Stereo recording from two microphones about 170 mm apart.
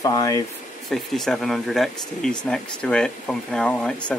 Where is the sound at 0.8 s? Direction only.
Centre (ahead or behind).